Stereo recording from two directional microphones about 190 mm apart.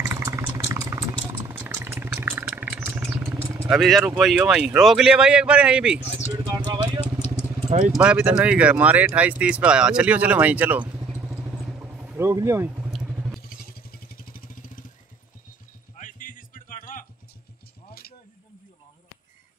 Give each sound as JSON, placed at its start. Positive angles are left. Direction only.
{"t": 0.0, "sound": "a sound", "side_deg": -15}
{"t": 3.5, "sound": "speech", "side_deg": -5}
{"t": 6.4, "sound": "vehicle", "side_deg": -20}
{"t": 7.9, "sound": "speech", "side_deg": -5}
{"t": 11.8, "sound": "vehicle", "side_deg": -10}
{"t": 12.9, "sound": "vehicle", "side_deg": 0}
{"t": 13.4, "sound": "vehicle", "side_deg": 50}
{"t": 16.0, "sound": "music", "side_deg": 45}